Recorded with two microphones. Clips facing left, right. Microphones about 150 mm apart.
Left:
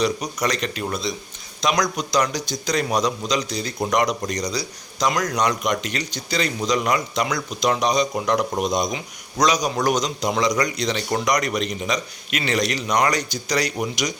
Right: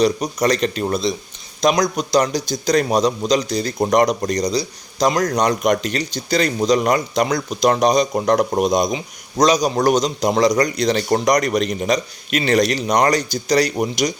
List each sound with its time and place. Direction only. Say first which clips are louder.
0.0 s speech: right 5 dB; 35° right (ahead or behind); by 8.9 s 50° right (ahead or behind)
9.4 s speech: right 5 dB; 30° right (ahead or behind)